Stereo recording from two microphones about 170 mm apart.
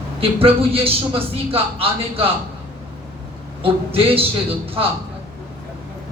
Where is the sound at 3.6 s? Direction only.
35° right (ahead or behind).